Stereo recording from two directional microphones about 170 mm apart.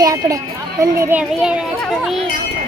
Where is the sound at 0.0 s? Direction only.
20° right (ahead or behind).